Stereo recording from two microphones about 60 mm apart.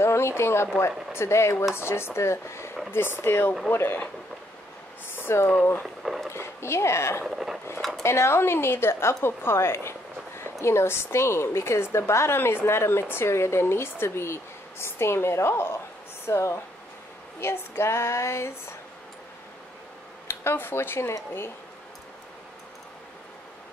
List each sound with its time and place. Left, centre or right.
0.0 s speech: left
5.1 s a sound: left
6.3 s speech: left
7.2 s speech: centre
8.0 s speech: left
9.2 s a sound: left
10.6 s speech: left
20.2 s speech: left